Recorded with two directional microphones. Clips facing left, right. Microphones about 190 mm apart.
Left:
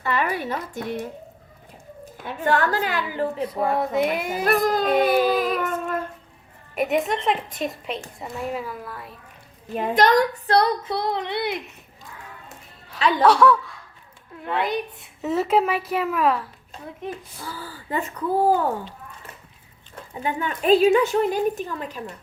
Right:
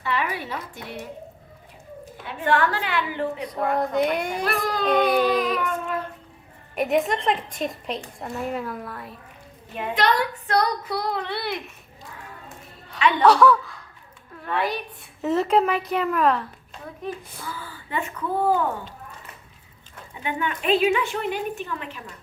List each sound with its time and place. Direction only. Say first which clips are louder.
0.0 s a woman's voice: left 3 dB; 45° left (ahead or behind)
2.2 s a woman's voice: even; 40° left (ahead or behind)
3.7 s a woman's voice: right 1 dB; 5° left (ahead or behind)
4.4 s a woman's voice: left 9 dB; 45° left (ahead or behind)
4.9 s baby cry: right 1 dB; 5° left (ahead or behind)
6.7 s a woman's voice: even; centre (ahead or behind)
9.7 s speech: left 5 dB; 40° left (ahead or behind); by 11.5 s 20° left (ahead or behind)
13.0 s speech: even; 35° left (ahead or behind)
13.2 s a woman's voice: even; centre (ahead or behind)
14.4 s speech: left 1 dB; 20° left (ahead or behind)
15.2 s a woman's voice: even; centre (ahead or behind)
17.4 s a woman's voice: left 1 dB; 35° left (ahead or behind)
20.1 s a woman's voice: left 1 dB; 40° left (ahead or behind)